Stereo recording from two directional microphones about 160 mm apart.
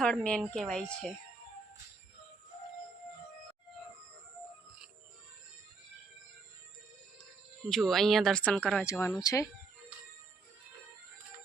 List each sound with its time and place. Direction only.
0.0 s speech: 5° left (ahead or behind)
7.7 s speech: centre (ahead or behind)
8.8 s speech: 15° left (ahead or behind)